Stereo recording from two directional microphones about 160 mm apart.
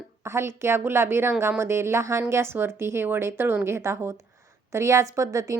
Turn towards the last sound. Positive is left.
turn(degrees=-20)  # may be behind; listen again after turning